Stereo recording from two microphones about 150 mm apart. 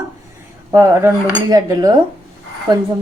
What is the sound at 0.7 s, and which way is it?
Speech, 15° right (ahead or behind).